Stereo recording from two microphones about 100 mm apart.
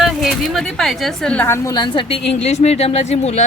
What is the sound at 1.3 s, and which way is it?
Speech, 25° left (ahead or behind).